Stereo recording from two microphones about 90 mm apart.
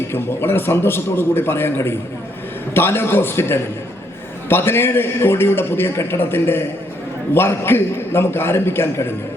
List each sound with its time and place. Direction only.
0.1 s a man's voice: 25° left (ahead or behind)